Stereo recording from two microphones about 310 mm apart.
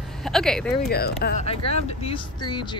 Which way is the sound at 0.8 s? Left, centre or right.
Left.